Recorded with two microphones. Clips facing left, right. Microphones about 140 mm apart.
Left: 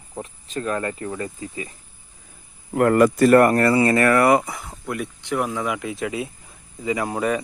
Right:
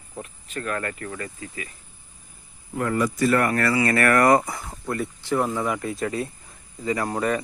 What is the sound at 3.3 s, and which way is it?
Speech, 40° left (ahead or behind).